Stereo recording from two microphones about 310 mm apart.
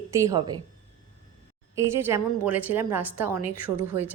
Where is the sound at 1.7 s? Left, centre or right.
Centre.